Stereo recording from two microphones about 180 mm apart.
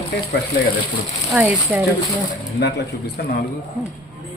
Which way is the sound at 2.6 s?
65° left (ahead or behind).